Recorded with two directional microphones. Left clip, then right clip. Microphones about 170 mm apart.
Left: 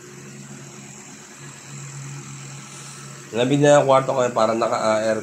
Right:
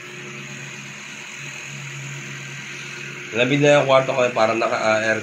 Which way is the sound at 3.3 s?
20° left (ahead or behind).